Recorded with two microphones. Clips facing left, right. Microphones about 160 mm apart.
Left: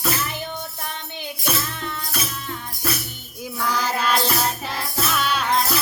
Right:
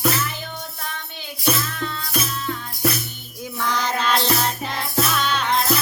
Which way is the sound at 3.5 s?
5° left (ahead or behind).